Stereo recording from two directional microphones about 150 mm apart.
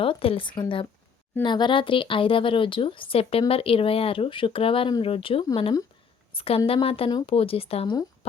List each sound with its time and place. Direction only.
0.0 s a woman's voice: 40° left (ahead or behind)